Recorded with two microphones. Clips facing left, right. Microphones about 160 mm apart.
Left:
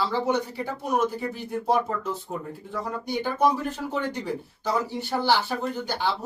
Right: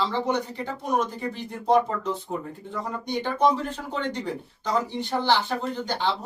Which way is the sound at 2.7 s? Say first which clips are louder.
Even; 10° left (ahead or behind).